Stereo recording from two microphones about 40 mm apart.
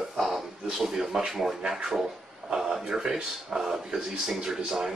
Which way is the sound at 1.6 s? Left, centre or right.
Right.